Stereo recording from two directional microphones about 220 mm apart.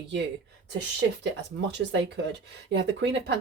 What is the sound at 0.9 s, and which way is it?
Speech, 55° right (ahead or behind).